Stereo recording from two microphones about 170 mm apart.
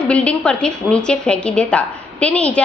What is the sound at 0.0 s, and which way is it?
A woman's voice, 5° left (ahead or behind).